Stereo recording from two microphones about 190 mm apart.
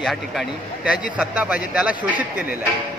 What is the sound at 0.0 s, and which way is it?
A man's voice, centre (ahead or behind).